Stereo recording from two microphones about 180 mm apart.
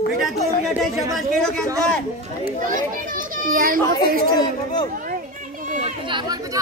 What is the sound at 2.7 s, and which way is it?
A child's voice, 45° right (ahead or behind).